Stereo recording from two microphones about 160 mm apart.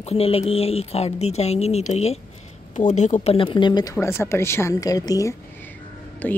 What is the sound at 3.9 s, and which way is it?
Speech, 15° left (ahead or behind).